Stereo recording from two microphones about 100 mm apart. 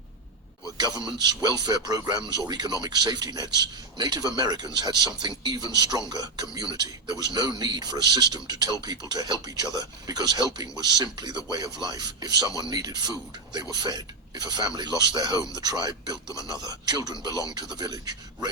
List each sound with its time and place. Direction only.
0.8 s a man's voice: 45° right (ahead or behind)